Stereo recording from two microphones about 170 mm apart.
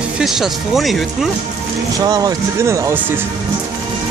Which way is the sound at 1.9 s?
20° right (ahead or behind).